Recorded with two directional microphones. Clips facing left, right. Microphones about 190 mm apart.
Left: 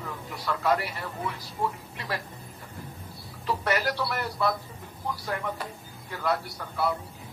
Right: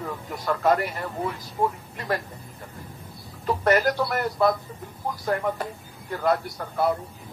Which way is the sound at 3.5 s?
50° right (ahead or behind).